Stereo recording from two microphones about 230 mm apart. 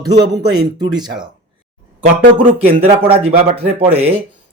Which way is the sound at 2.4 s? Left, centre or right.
Right.